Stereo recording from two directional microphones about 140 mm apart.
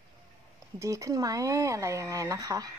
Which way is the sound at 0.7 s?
20° right (ahead or behind).